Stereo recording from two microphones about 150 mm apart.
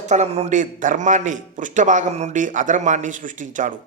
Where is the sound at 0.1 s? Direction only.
50° right (ahead or behind).